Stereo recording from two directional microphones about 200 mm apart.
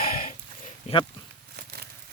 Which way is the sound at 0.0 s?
45° left (ahead or behind).